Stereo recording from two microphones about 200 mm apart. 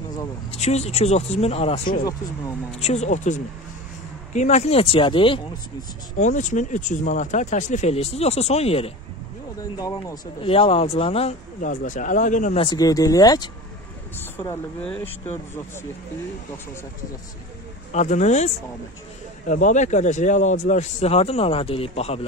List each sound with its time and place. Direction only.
0.2 s speech: 30° left (ahead or behind)
9.6 s speech: 15° left (ahead or behind)
10.5 s speech: 30° left (ahead or behind)
12.6 s speech: 20° left (ahead or behind)
17.9 s speech: 35° left (ahead or behind)